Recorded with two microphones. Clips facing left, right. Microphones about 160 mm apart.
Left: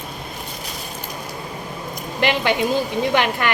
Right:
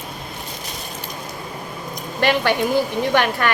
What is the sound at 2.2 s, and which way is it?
A woman's voice, 15° left (ahead or behind).